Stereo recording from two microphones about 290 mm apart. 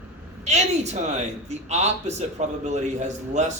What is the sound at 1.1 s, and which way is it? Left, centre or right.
A man's voice, right.